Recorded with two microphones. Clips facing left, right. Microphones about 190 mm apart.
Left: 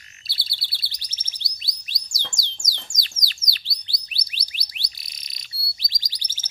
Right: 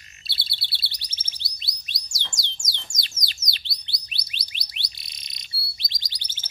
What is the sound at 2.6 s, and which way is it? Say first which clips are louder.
Bird: left 1 dB; 25° right (ahead or behind).